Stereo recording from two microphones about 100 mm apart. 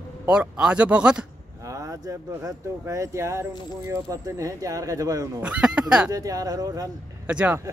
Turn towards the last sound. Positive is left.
turn(degrees=-10)  # may be behind; listen again after turning